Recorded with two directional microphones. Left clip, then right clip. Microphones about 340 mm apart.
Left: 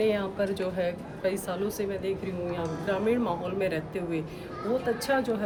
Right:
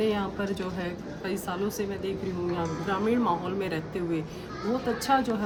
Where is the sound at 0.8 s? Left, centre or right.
Centre.